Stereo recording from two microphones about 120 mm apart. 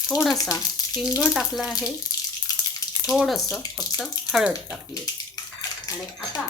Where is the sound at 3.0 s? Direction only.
5° right (ahead or behind).